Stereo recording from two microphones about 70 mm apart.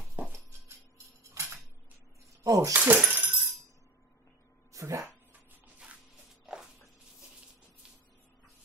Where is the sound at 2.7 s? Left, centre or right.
Right.